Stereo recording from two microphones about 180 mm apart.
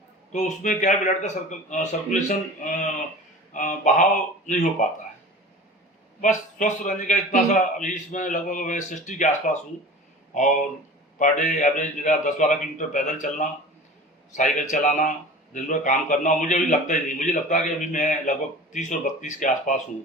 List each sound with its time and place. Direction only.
0.3 s a man's voice: 45° left (ahead or behind)
6.2 s a man's voice: 45° left (ahead or behind)